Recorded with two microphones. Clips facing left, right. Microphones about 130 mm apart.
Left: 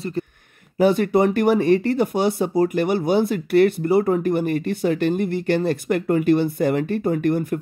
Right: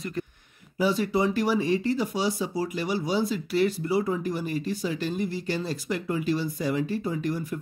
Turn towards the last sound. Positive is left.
turn(degrees=55)  # may be behind; listen again after turning